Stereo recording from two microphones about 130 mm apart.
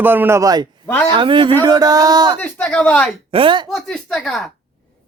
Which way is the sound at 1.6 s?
30° right (ahead or behind).